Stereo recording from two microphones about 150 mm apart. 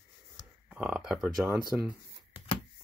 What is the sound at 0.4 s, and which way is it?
Speech, 5° right (ahead or behind).